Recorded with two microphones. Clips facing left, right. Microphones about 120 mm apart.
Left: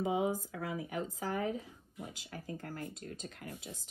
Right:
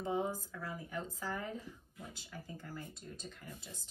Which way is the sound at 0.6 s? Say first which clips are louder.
Left 5 dB; 75° left (ahead or behind).